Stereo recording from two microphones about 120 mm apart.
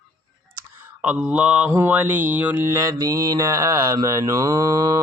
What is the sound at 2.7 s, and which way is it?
Mantra, 25° right (ahead or behind).